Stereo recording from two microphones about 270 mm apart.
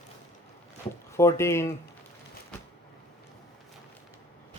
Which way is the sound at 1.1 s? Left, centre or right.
Centre.